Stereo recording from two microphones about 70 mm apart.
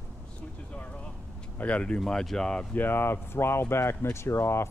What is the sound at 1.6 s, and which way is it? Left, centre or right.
Speech, centre.